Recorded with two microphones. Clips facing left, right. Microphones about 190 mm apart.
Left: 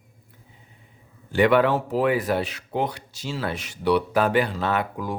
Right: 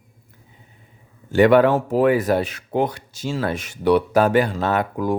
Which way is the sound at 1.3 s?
45° right (ahead or behind).